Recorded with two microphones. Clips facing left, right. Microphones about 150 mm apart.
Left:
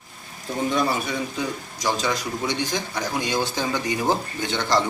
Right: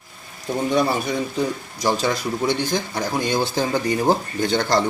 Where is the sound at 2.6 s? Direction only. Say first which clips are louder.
Right 3 dB; 35° right (ahead or behind).